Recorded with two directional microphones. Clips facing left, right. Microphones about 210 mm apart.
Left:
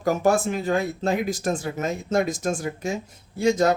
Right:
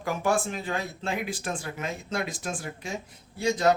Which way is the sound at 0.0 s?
40° left (ahead or behind).